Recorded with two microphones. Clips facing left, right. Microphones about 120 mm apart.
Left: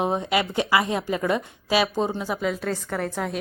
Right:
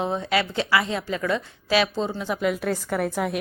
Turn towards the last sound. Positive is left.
turn(degrees=-5)  # may be behind; listen again after turning